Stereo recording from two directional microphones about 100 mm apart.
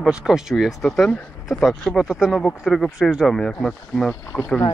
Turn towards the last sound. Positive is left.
turn(degrees=15)  # may be behind; listen again after turning